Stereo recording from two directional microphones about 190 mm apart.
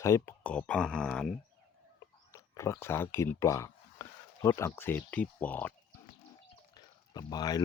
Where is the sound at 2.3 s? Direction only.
15° left (ahead or behind).